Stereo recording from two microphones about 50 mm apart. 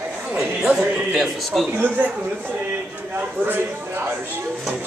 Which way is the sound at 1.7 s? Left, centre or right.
Right.